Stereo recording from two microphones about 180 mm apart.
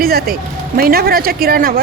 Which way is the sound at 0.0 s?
55° right (ahead or behind).